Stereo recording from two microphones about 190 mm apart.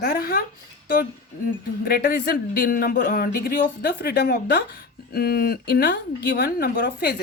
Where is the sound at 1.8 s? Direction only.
55° left (ahead or behind).